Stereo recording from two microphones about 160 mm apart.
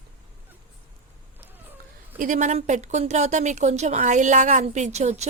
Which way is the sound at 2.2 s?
50° right (ahead or behind).